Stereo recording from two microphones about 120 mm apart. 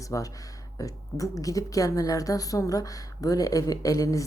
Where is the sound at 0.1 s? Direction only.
30° left (ahead or behind).